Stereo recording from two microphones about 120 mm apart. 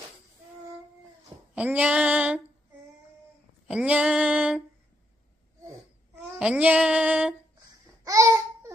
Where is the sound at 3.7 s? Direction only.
10° right (ahead or behind).